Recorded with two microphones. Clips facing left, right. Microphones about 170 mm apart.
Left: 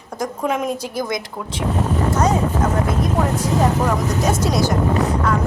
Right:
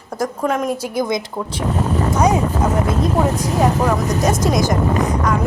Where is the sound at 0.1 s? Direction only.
Centre (ahead or behind).